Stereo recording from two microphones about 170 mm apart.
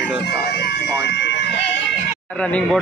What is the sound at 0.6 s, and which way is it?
Emergency vehicle, 80° left.